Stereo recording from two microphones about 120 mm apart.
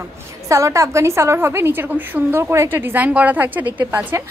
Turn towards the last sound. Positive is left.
turn(degrees=-15)  # may be behind; listen again after turning